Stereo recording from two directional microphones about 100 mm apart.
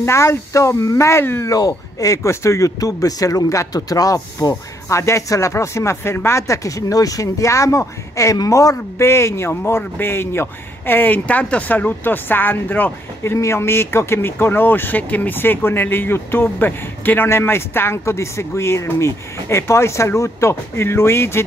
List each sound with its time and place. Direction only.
0.0 s a man's voice: 30° left (ahead or behind)